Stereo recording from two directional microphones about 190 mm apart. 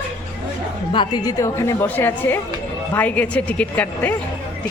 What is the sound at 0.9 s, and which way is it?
A woman's voice, 25° left (ahead or behind).